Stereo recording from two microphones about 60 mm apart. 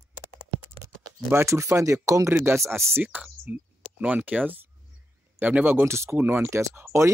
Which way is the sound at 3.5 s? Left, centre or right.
Right.